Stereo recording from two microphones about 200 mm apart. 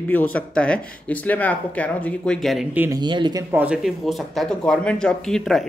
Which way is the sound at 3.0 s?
20° right (ahead or behind).